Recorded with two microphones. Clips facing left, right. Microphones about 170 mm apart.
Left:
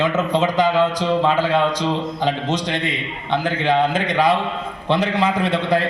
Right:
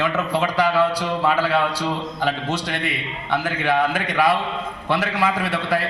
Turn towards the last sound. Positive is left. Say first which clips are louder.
# left 4 dB
turn(degrees=20)  # may be behind; listen again after turning